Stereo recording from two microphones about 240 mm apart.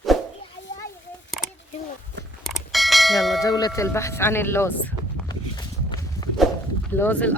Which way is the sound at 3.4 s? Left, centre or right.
Centre.